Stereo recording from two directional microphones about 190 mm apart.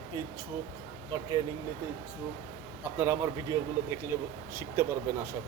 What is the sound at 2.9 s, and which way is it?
Speech, 10° right (ahead or behind).